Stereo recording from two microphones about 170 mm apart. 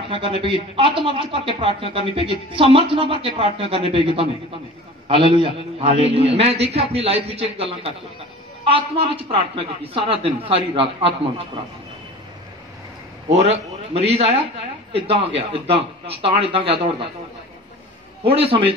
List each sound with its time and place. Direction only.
0.1 s a man's voice: 30° right (ahead or behind)
13.9 s a man's voice: 35° right (ahead or behind)
18.2 s a man's voice: 35° right (ahead or behind)